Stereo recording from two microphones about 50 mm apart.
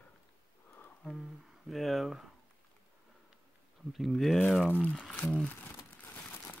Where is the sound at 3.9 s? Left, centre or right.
Centre.